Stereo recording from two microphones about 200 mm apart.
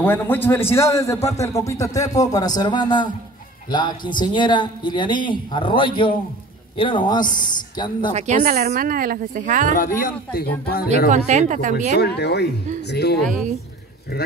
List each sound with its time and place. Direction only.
0.0 s a man's voice: 10° left (ahead or behind)
8.1 s speech: 35° right (ahead or behind)
9.8 s speech: 45° left (ahead or behind)
11.1 s speech: 35° right (ahead or behind)
12.0 s speech: 55° left (ahead or behind)